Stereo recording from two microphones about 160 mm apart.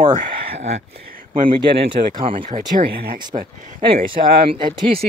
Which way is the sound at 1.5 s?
30° right (ahead or behind).